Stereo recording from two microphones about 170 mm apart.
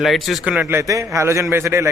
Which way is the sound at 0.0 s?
Centre (ahead or behind).